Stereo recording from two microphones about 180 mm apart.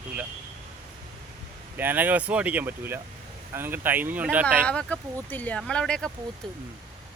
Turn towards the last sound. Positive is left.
turn(degrees=5)  # may be behind; listen again after turning